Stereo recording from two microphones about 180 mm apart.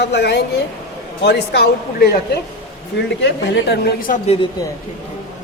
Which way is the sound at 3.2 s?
80° left.